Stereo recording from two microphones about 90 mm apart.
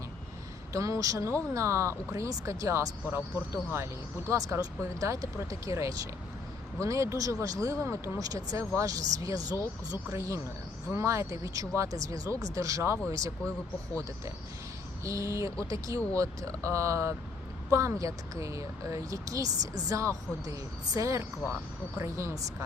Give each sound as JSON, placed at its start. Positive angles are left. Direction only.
{"t": 0.7, "sound": "speech", "side_deg": -35}
{"t": 3.1, "sound": "speech", "side_deg": -25}
{"t": 15.0, "sound": "speech", "side_deg": -35}